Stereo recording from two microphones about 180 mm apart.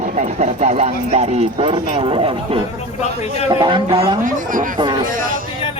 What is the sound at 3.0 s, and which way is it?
Speech, 40° left (ahead or behind).